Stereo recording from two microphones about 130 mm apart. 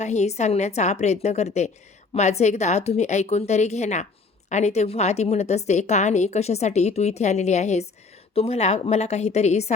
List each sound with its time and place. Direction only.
0.0 s a woman's voice: 60° left (ahead or behind)